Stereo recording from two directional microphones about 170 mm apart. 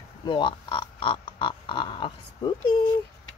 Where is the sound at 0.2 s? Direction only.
30° left (ahead or behind).